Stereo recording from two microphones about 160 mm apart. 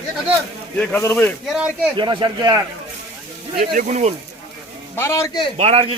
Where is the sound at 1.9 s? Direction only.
30° right (ahead or behind).